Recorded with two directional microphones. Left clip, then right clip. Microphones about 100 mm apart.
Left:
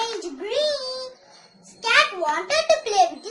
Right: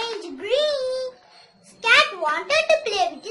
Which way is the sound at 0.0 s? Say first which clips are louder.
Left 1 dB; 30° right (ahead or behind).